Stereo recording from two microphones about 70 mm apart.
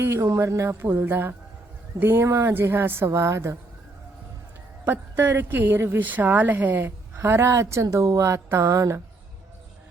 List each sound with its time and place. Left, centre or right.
0.0 s a woman's voice: right
0.8 s speech: right
3.1 s a woman's voice: right
4.9 s a woman's voice: right